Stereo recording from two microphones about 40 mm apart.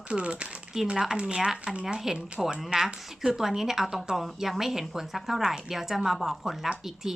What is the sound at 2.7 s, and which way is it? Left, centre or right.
Speech, right.